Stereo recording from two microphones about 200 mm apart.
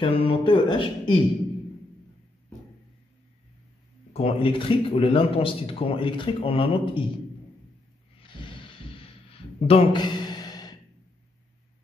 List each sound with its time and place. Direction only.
0.0 s speech: 30° left (ahead or behind)
4.1 s speech: 30° left (ahead or behind)
8.2 s a sound: 25° left (ahead or behind)